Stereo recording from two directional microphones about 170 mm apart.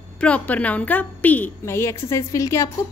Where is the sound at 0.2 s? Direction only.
10° left (ahead or behind).